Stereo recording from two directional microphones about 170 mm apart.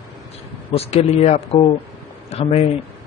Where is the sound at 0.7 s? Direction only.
35° left (ahead or behind).